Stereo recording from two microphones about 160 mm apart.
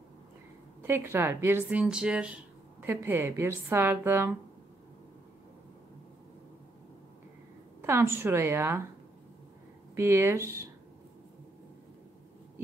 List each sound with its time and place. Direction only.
0.8 s a woman's voice: 15° right (ahead or behind)
7.8 s a woman's voice: 15° right (ahead or behind)
9.9 s a woman's voice: 15° right (ahead or behind)